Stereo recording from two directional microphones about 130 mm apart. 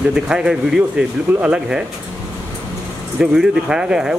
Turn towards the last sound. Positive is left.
turn(degrees=-5)  # may be behind; listen again after turning